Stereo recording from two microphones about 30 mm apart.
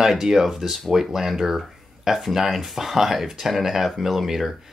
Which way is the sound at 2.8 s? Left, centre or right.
Centre.